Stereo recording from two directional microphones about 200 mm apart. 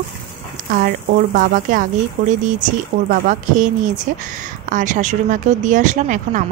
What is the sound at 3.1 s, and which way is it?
Speech, 40° right (ahead or behind).